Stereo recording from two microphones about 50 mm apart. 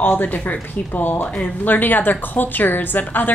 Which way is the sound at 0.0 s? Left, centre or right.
Left.